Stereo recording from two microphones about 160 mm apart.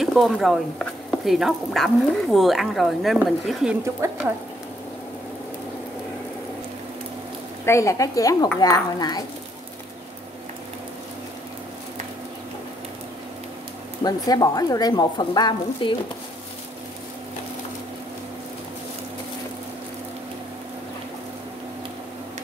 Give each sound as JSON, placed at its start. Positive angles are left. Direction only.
{"t": 0.0, "sound": "speech", "side_deg": 0}
{"t": 7.6, "sound": "speech", "side_deg": 20}
{"t": 14.0, "sound": "speech", "side_deg": 25}